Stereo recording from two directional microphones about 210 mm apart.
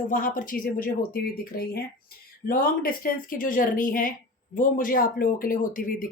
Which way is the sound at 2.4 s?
45° left (ahead or behind).